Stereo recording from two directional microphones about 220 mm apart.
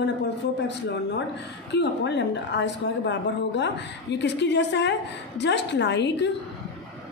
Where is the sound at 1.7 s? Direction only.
50° left (ahead or behind).